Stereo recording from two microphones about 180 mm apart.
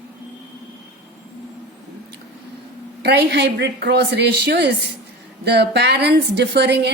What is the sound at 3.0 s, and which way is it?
A woman's voice, 70° right (ahead or behind).